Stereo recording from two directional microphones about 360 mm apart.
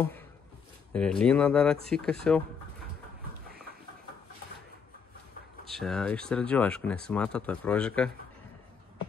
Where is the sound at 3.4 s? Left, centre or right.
Right.